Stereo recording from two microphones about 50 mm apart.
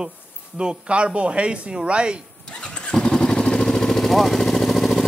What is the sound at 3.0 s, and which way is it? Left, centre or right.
Vehicle, centre.